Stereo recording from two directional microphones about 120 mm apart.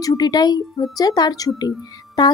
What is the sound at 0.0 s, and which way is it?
A woman's voice, 30° left (ahead or behind).